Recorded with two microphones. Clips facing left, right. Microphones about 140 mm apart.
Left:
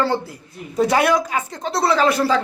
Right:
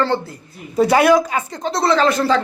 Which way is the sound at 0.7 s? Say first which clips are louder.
Right 4 dB; centre (ahead or behind).